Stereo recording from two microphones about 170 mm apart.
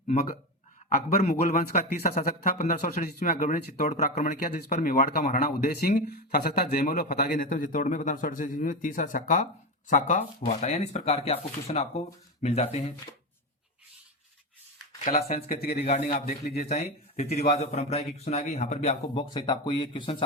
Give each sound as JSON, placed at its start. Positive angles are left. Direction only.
{"t": 0.9, "sound": "a man's voice", "side_deg": 45}
{"t": 15.1, "sound": "a man's voice", "side_deg": 55}
{"t": 15.7, "sound": "a man's voice", "side_deg": 40}
{"t": 16.0, "sound": "a man's voice", "side_deg": 55}
{"t": 16.5, "sound": "a man's voice", "side_deg": 40}